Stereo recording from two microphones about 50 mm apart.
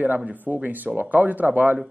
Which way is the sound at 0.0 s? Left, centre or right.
Right.